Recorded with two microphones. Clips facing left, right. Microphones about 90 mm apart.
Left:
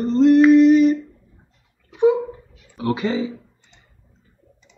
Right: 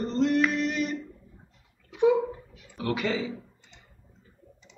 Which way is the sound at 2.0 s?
35° left (ahead or behind).